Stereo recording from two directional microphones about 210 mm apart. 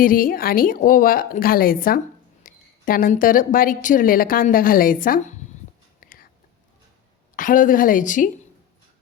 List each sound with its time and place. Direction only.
0.0 s a woman's voice: 40° left (ahead or behind)
6.0 s whispering: 40° left (ahead or behind)
7.3 s a woman's voice: 40° left (ahead or behind)